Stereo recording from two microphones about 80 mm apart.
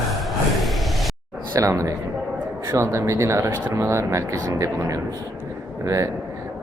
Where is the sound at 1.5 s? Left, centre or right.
Right.